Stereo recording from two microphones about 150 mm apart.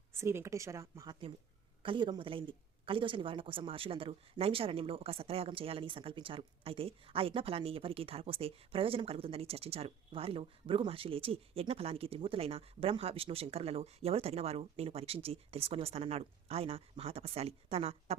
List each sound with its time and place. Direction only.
0.1 s a woman's voice: 15° right (ahead or behind)
1.8 s speech: 35° right (ahead or behind)